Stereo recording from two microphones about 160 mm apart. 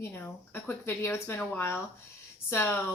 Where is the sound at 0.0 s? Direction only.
10° left (ahead or behind).